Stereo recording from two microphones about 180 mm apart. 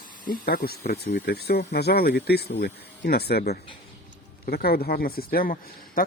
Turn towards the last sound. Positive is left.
turn(degrees=50)  # may be behind; listen again after turning